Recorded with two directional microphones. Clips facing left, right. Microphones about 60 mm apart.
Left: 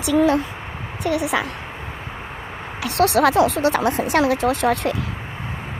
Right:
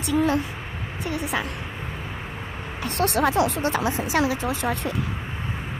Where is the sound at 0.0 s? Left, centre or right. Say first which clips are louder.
Left 5 dB; left.